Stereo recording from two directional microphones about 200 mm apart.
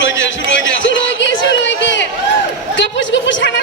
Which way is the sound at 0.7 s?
70° left (ahead or behind).